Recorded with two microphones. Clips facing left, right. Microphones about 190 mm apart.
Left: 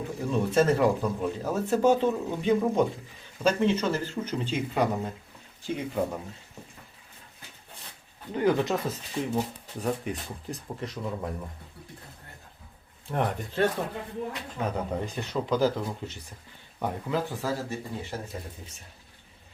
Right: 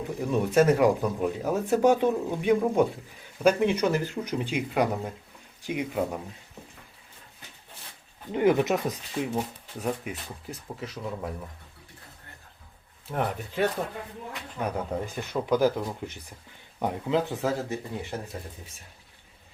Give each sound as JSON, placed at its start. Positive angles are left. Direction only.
{"t": 0.3, "sound": "speech", "side_deg": -15}
{"t": 8.3, "sound": "speech", "side_deg": -20}
{"t": 13.1, "sound": "speech", "side_deg": -5}